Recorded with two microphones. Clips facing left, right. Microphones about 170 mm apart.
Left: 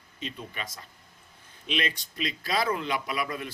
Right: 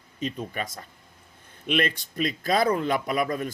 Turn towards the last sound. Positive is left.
turn(degrees=-45)  # may be behind; listen again after turning